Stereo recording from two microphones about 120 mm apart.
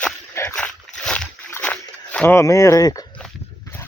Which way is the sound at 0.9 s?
5° left (ahead or behind).